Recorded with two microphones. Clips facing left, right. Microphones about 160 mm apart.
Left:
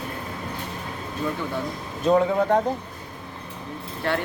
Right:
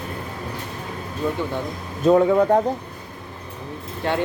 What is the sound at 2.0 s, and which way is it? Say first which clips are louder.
Speech: right 4 dB; 40° right (ahead or behind).